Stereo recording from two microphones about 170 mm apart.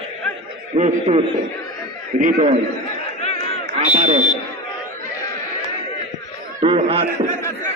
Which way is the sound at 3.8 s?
40° right (ahead or behind).